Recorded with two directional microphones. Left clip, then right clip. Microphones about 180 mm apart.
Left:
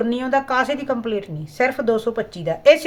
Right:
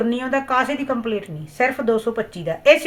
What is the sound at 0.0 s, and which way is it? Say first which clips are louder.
Speech: left 1 dB; 15° left (ahead or behind).